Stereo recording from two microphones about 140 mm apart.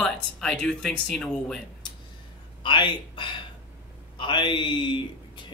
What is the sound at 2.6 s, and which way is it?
A man's voice, 35° left (ahead or behind).